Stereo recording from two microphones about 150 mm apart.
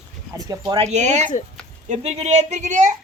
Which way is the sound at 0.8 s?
50° right (ahead or behind).